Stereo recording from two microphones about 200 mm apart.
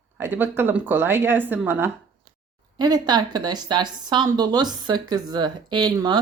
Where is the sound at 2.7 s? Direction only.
20° right (ahead or behind).